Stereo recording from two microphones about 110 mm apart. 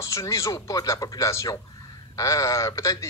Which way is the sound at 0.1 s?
25° left (ahead or behind).